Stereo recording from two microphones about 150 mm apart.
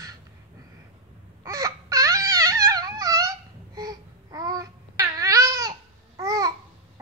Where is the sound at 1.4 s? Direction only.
20° right (ahead or behind).